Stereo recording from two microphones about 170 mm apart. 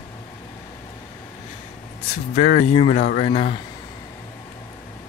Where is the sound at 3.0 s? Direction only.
50° left (ahead or behind).